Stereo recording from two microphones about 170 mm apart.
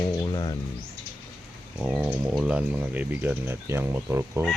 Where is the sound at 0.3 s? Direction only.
25° left (ahead or behind).